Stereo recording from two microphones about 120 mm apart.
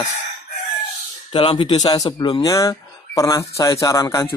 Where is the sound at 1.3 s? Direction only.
45° left (ahead or behind).